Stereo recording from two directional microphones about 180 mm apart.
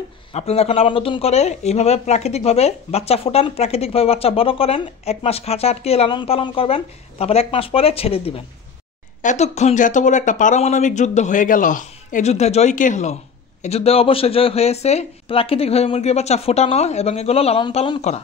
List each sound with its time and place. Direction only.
0.3 s speech: 35° left (ahead or behind)